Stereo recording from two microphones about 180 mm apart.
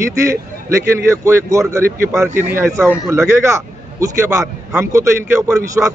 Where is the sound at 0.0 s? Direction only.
15° right (ahead or behind).